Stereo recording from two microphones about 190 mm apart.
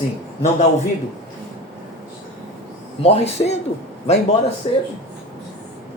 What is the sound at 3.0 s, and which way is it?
Speech, 35° left (ahead or behind).